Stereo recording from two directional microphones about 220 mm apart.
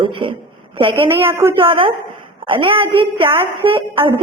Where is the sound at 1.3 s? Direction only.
10° right (ahead or behind).